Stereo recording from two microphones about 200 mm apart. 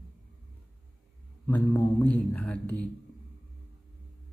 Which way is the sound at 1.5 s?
10° left (ahead or behind).